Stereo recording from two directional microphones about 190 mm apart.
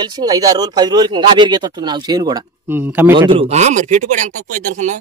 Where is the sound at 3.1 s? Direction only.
25° right (ahead or behind).